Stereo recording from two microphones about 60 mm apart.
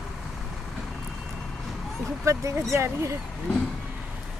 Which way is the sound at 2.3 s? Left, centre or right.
Right.